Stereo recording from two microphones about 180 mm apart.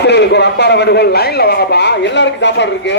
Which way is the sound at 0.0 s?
70° left (ahead or behind).